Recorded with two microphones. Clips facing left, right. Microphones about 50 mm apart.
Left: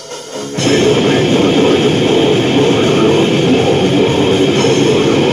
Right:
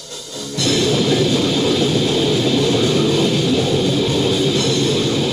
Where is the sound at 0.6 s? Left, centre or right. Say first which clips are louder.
Left 7 dB; left.